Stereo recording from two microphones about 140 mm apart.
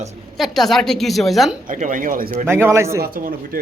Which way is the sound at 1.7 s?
70° right (ahead or behind).